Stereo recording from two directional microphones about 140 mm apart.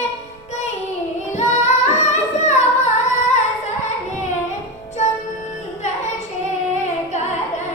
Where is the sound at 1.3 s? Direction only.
55° left (ahead or behind).